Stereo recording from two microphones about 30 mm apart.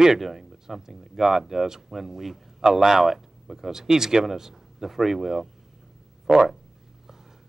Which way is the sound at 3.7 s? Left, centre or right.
Centre.